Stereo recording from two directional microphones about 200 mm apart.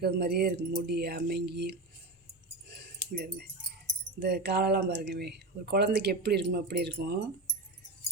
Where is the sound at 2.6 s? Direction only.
55° right (ahead or behind).